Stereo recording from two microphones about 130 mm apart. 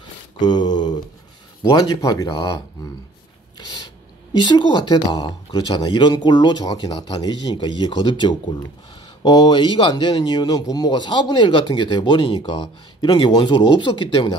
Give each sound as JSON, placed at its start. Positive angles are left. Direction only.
{"t": 0.4, "sound": "speech", "side_deg": 35}
{"t": 3.5, "sound": "a sound", "side_deg": 35}
{"t": 4.4, "sound": "speech", "side_deg": 35}